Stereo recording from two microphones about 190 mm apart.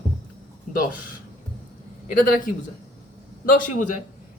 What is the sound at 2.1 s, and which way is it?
Speech, 45° left (ahead or behind).